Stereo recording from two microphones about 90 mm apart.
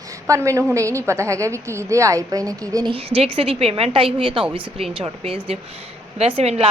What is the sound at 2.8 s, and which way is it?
A woman's voice, 85° right.